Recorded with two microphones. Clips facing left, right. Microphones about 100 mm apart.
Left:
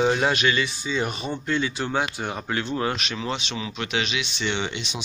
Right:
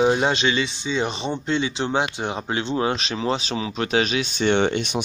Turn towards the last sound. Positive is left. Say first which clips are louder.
# right 8 dB
turn(degrees=-50)  # may be behind; listen again after turning